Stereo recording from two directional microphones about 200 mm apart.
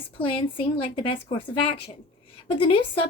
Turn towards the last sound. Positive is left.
turn(degrees=25)  # may be behind; listen again after turning